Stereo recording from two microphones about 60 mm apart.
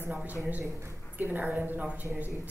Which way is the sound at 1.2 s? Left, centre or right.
Right.